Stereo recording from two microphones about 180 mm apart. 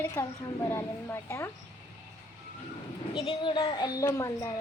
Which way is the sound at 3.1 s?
25° left (ahead or behind).